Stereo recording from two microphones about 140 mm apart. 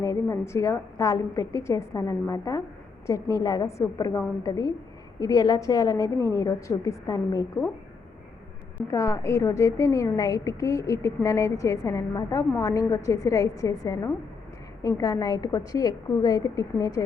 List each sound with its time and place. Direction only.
0.0 s a woman's voice: 25° left (ahead or behind)
8.9 s a woman's voice: 20° left (ahead or behind)